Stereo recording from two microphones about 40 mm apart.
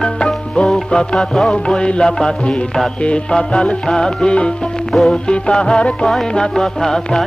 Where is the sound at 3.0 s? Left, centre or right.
Left.